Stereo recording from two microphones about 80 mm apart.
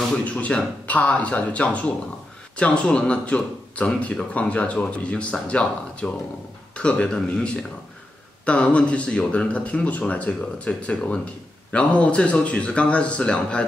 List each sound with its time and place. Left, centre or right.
0.2 s speech: centre